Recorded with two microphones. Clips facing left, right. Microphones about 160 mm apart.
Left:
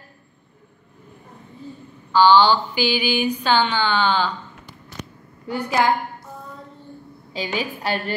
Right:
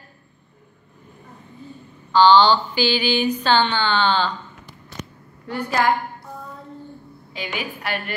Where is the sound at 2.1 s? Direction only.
10° left (ahead or behind).